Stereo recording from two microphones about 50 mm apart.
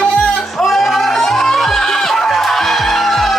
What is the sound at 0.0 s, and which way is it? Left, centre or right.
Music, left.